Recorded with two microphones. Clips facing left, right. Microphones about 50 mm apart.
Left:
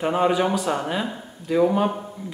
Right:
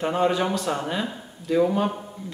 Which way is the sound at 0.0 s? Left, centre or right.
Centre.